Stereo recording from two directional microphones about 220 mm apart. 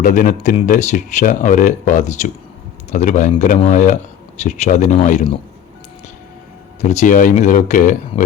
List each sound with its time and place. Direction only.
0.0 s speech: 35° left (ahead or behind)
6.8 s speech: 35° left (ahead or behind)